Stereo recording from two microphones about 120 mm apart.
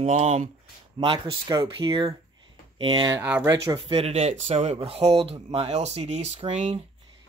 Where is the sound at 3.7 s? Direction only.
50° right (ahead or behind); by 6.8 s 70° right (ahead or behind).